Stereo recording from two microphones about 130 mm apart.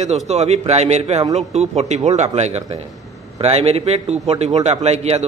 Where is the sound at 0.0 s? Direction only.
55° right (ahead or behind).